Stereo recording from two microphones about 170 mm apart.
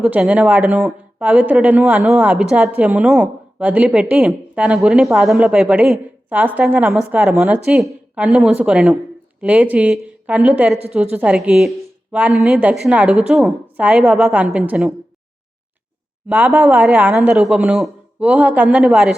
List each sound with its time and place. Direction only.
0.0 s a woman's voice: 5° right (ahead or behind)
16.3 s speech: 10° right (ahead or behind)